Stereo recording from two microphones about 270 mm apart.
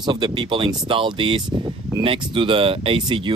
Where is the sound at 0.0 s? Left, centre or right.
Centre.